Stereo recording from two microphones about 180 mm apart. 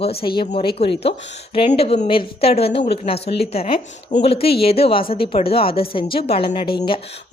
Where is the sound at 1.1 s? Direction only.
75° left (ahead or behind).